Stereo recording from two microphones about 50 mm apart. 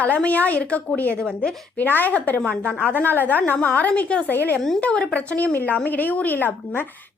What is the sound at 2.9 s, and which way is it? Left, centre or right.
A woman's voice, left.